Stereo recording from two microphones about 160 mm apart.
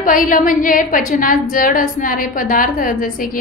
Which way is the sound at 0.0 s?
55° left (ahead or behind).